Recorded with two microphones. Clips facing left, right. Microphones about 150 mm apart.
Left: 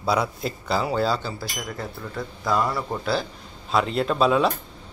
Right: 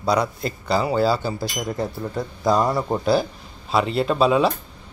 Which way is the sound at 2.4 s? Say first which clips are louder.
Right 4 dB; 40° right (ahead or behind).